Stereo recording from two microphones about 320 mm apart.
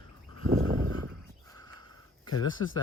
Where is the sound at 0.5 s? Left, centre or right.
Right.